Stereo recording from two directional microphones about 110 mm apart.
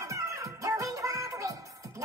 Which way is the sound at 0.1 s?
30° right (ahead or behind).